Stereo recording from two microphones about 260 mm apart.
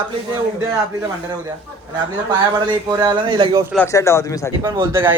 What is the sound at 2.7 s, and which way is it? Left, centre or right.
Speech, centre.